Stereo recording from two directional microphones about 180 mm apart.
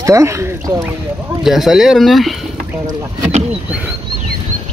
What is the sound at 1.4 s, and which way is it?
Speech, centre (ahead or behind).